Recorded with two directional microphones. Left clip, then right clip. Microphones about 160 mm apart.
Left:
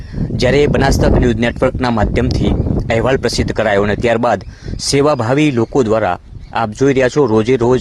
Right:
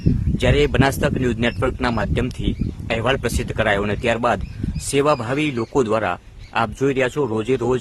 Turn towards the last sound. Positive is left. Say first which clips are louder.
# left 8 dB
turn(degrees=35)  # may be behind; listen again after turning